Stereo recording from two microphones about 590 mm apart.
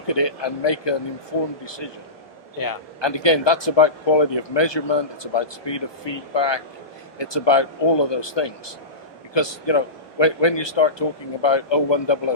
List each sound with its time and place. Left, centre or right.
0.1 s speech: left